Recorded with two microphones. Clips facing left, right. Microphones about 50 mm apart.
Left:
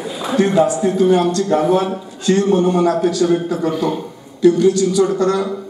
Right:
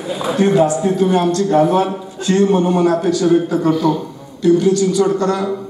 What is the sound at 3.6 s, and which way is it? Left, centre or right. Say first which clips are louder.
Speech: right 2 dB; centre.